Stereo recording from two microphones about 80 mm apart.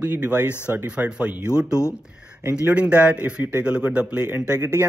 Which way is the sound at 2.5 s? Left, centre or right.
Centre.